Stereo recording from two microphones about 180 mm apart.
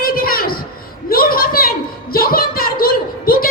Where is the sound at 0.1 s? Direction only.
55° left (ahead or behind).